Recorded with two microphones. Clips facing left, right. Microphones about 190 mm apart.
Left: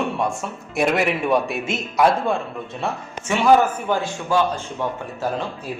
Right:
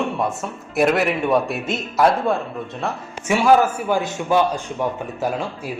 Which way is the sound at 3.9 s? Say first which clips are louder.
Right 3 dB; 20° right (ahead or behind).